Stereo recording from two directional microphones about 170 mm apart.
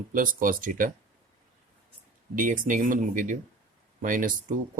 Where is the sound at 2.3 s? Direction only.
50° right (ahead or behind).